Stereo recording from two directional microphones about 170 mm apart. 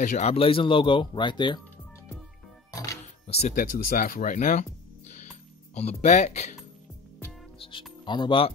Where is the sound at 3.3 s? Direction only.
40° left (ahead or behind).